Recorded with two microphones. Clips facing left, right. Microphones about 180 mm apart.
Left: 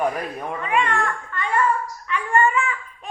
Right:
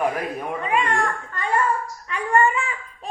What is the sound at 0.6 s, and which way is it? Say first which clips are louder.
Speech: even; 35° right (ahead or behind).